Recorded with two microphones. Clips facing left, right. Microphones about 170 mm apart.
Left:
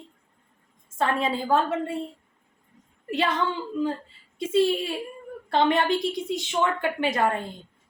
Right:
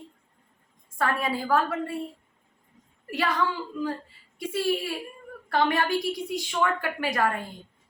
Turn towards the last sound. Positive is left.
turn(degrees=25)  # may be behind; listen again after turning